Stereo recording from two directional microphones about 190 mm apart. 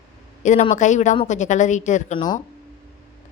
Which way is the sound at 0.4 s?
40° left (ahead or behind).